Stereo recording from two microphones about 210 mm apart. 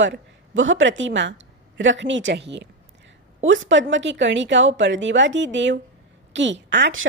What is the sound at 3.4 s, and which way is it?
A woman's voice, 65° right (ahead or behind).